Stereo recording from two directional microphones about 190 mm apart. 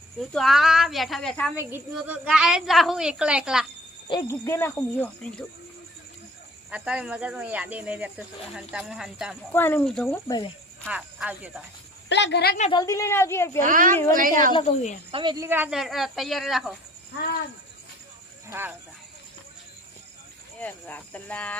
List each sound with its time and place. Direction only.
0.3 s speech: centre (ahead or behind)
1.5 s speech: 10° right (ahead or behind)
4.1 s speech: 15° left (ahead or behind)
6.7 s speech: 5° right (ahead or behind)
9.5 s speech: 10° left (ahead or behind)
10.2 s speech: 20° left (ahead or behind)
10.8 s speech: 5° right (ahead or behind)
12.0 s a woman's voice: 65° left (ahead or behind)
12.7 s speech: 15° left (ahead or behind)
13.6 s a woman's voice: 45° right (ahead or behind)
15.1 s speech: 25° right (ahead or behind)
15.4 s speech: 10° right (ahead or behind)
18.4 s speech: 10° right (ahead or behind)
20.6 s speech: 10° left (ahead or behind)